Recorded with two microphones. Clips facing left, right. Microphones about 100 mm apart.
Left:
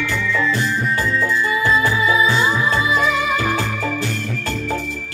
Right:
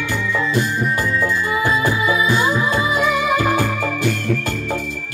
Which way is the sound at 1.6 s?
20° right (ahead or behind).